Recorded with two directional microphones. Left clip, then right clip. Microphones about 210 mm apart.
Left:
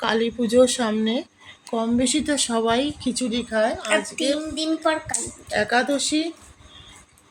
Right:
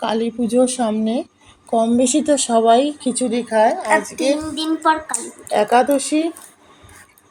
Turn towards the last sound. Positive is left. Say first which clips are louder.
# right 6 dB
turn(degrees=-5)  # may be behind; listen again after turning